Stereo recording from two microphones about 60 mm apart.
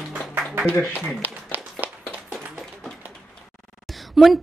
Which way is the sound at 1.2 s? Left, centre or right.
Right.